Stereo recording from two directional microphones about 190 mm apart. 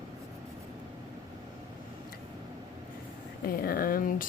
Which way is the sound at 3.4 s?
50° left (ahead or behind).